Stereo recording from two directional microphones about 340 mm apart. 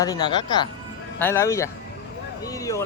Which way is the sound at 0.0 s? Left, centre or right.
Centre.